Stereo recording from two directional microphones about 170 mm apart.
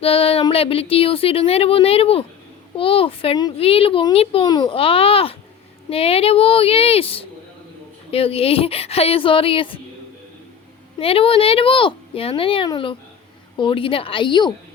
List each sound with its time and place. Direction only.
0.0 s speech: 35° left (ahead or behind)
11.0 s a woman's voice: 35° left (ahead or behind)